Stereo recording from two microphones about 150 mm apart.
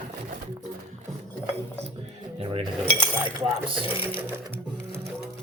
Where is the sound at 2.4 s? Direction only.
40° right (ahead or behind).